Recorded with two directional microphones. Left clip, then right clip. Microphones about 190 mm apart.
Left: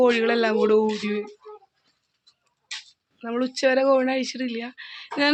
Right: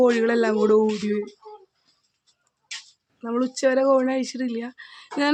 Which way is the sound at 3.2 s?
25° right (ahead or behind).